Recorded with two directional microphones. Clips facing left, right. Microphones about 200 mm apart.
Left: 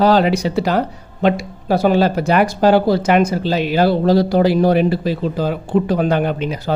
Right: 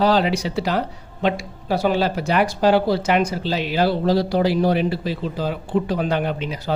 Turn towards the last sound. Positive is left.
turn(degrees=50)  # may be behind; listen again after turning